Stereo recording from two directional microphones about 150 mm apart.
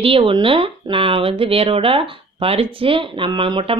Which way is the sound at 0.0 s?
35° right (ahead or behind).